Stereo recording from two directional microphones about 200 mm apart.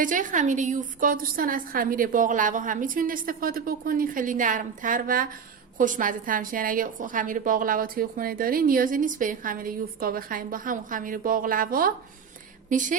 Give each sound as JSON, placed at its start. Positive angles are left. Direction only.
{"t": 0.0, "sound": "a woman's voice", "side_deg": -40}